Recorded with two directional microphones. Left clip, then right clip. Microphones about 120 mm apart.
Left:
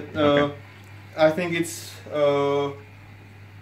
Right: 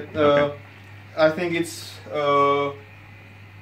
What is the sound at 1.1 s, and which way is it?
Speech, 20° left (ahead or behind).